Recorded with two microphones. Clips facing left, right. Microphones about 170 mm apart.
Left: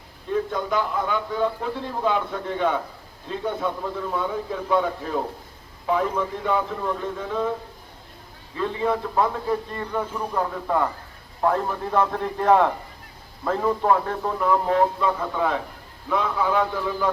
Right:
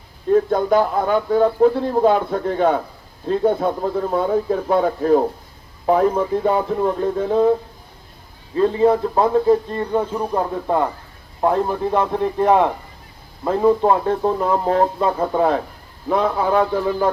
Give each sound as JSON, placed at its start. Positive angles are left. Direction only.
{"t": 0.3, "sound": "a man's voice", "side_deg": -45}
{"t": 8.5, "sound": "speech", "side_deg": -35}
{"t": 9.5, "sound": "speech", "side_deg": -25}